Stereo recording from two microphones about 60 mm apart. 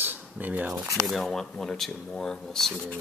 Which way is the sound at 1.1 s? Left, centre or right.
Centre.